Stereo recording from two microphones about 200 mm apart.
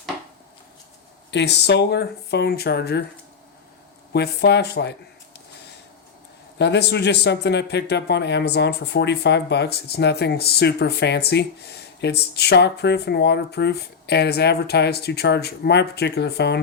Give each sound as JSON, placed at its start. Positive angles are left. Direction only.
{"t": 1.3, "sound": "a man's voice", "side_deg": 60}
{"t": 4.1, "sound": "a man's voice", "side_deg": 55}
{"t": 6.6, "sound": "a man's voice", "side_deg": 55}